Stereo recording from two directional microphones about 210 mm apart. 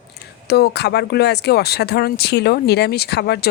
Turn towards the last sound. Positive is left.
turn(degrees=50)  # may be behind; listen again after turning